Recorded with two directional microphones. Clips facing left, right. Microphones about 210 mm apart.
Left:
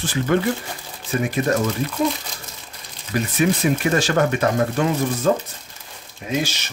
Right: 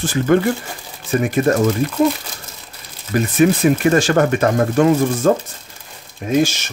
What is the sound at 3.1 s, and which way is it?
Speech, 50° right (ahead or behind).